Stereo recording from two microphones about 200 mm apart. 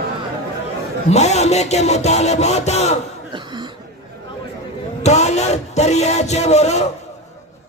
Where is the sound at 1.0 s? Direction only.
35° left (ahead or behind).